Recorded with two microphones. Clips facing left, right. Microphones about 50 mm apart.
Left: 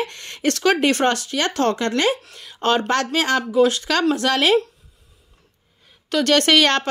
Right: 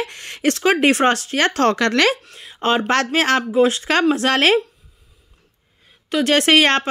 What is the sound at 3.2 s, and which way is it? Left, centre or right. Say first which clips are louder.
Speech: right 3 dB; right.